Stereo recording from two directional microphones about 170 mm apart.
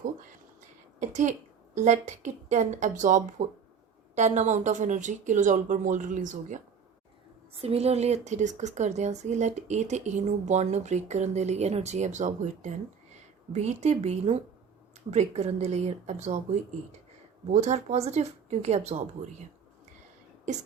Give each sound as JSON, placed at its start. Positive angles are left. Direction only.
{"t": 0.9, "sound": "speech", "side_deg": -45}
{"t": 7.6, "sound": "speech", "side_deg": -35}